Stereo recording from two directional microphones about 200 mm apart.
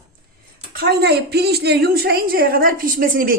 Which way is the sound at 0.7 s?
55° right (ahead or behind).